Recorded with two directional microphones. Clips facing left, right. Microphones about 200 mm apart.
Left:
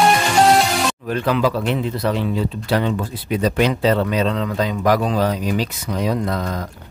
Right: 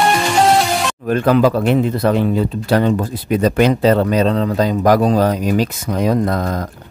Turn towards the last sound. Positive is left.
turn(degrees=-45)  # may be behind; listen again after turning